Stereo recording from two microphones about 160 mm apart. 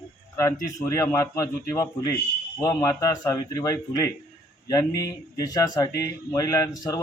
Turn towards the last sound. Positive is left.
turn(degrees=25)  # may be behind; listen again after turning